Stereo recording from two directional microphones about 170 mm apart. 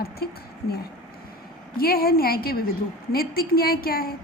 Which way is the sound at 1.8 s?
60° left (ahead or behind).